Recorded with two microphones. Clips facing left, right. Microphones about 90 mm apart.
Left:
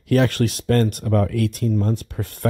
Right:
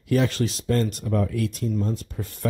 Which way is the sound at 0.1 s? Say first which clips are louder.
Left 4 dB; 60° left (ahead or behind).